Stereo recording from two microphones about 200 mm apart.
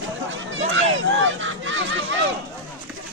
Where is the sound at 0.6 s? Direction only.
70° right (ahead or behind).